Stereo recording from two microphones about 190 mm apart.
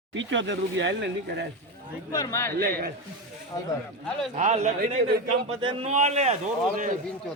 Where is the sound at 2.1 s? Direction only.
15° left (ahead or behind).